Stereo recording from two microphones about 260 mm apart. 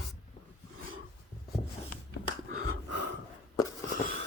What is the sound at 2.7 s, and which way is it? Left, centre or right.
Gasp, right.